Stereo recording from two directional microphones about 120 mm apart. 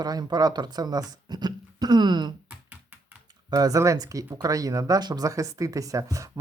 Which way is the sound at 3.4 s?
30° right (ahead or behind).